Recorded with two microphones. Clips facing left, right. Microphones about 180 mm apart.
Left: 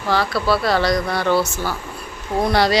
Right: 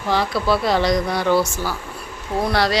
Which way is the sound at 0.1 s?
20° right (ahead or behind).